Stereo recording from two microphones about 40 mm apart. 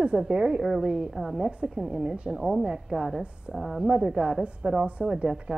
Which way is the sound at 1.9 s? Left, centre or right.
Right.